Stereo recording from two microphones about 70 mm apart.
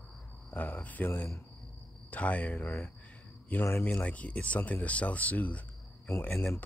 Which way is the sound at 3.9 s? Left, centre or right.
Centre.